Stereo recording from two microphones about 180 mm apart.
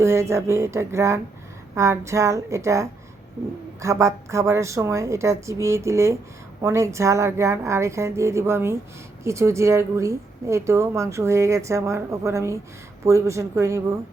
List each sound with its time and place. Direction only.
0.0 s a woman's voice: 15° right (ahead or behind)